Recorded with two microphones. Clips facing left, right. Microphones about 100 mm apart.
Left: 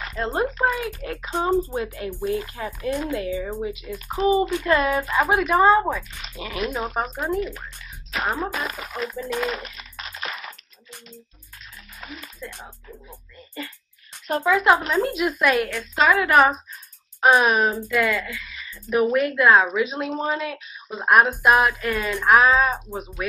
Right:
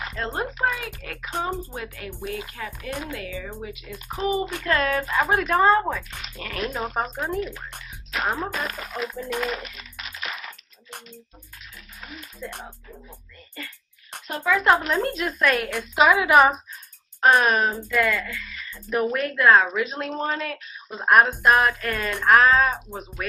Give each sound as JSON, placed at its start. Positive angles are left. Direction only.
{"t": 0.1, "sound": "speech", "side_deg": 10}
{"t": 8.1, "sound": "speech", "side_deg": 0}
{"t": 8.5, "sound": "speech", "side_deg": 15}
{"t": 12.4, "sound": "a woman's voice", "side_deg": -10}
{"t": 14.4, "sound": "speech", "side_deg": 15}
{"t": 15.7, "sound": "a woman's voice", "side_deg": -15}
{"t": 17.2, "sound": "speech", "side_deg": 10}